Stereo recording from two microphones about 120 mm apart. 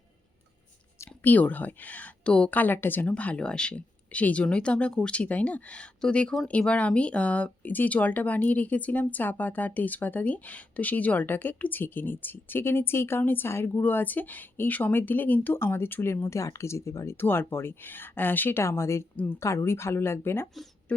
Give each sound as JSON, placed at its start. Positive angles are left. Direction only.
{"t": 1.2, "sound": "speech", "side_deg": 15}